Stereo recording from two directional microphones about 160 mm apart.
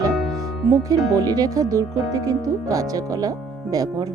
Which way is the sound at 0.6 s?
20° right (ahead or behind).